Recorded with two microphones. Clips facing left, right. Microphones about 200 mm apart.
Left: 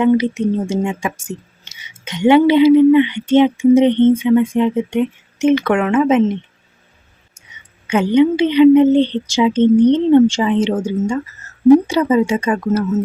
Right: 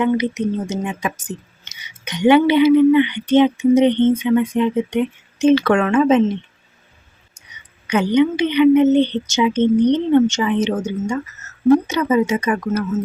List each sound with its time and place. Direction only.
0.0 s speech: 30° left (ahead or behind)
7.3 s speech: 25° left (ahead or behind)